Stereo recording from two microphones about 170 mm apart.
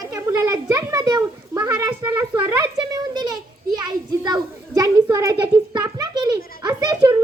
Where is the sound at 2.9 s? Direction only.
25° right (ahead or behind).